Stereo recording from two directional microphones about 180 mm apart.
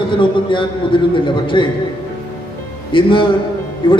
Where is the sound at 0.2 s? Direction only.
25° left (ahead or behind).